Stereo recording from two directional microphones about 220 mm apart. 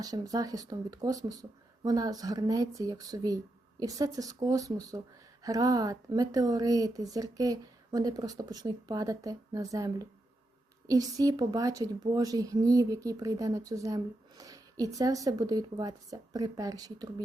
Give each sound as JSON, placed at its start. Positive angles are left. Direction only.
{"t": 0.0, "sound": "a woman's voice", "side_deg": -15}